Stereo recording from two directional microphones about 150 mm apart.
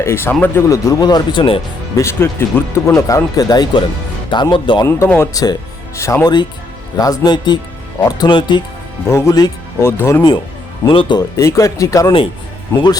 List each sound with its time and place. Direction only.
0.0 s speech: 15° left (ahead or behind); by 1.6 s 35° left (ahead or behind)
2.0 s speech: 15° left (ahead or behind); by 4.9 s 35° left (ahead or behind)
4.9 s speech: 15° left (ahead or behind); by 8.6 s 30° left (ahead or behind)
9.0 s speech: 20° left (ahead or behind)
10.8 s speech: 35° left (ahead or behind)
11.3 s speech: 20° left (ahead or behind)